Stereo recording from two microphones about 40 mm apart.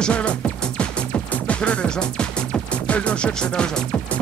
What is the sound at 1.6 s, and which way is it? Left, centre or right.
Speech, left.